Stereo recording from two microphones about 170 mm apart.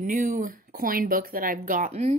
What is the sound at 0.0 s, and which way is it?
Speech, 50° right (ahead or behind).